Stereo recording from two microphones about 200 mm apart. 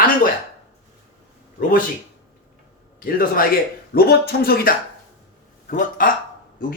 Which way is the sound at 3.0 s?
45° left (ahead or behind).